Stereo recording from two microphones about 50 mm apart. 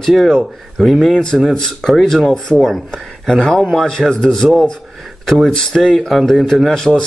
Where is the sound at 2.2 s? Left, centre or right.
Centre.